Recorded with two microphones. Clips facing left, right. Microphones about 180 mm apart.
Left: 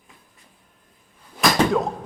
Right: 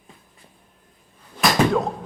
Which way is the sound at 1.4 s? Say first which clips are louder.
Even; centre (ahead or behind).